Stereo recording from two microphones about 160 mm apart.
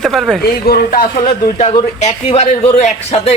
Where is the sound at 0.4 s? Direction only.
75° left (ahead or behind).